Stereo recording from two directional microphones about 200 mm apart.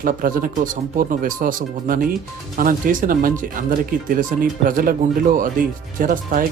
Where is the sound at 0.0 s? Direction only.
45° right (ahead or behind).